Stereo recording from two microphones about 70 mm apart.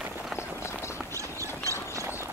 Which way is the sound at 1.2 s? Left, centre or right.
Right.